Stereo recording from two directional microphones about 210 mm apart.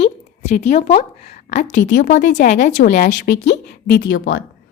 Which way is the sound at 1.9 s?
40° left (ahead or behind).